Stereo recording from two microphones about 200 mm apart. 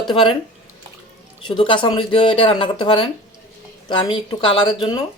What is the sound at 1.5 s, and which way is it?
A man's voice, 25° left (ahead or behind).